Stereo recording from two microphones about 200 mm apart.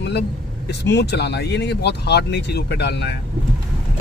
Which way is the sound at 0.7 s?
55° left (ahead or behind).